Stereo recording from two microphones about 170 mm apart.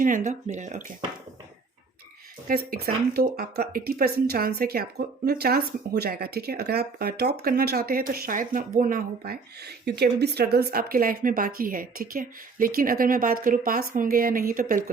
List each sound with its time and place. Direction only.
0.0 s speech: 50° right (ahead or behind)
2.5 s speech: 60° right (ahead or behind)